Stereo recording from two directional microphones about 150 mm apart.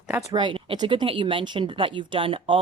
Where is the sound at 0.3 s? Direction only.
35° right (ahead or behind).